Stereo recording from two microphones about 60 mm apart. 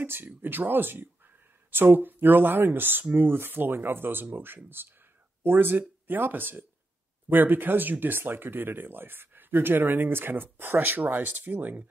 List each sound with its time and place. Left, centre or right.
0.0 s speech: right